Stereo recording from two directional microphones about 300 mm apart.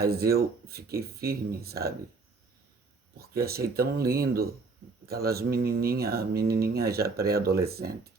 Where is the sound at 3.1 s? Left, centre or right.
Right.